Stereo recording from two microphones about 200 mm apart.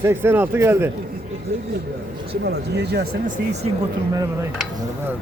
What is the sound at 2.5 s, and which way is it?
Speech, 55° right (ahead or behind).